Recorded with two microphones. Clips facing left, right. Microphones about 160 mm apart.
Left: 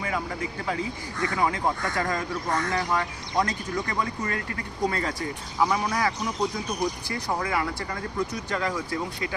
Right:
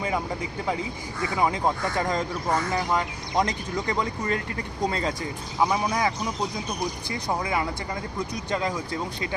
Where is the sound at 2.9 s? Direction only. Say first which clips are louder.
Right 1 dB; 20° right (ahead or behind).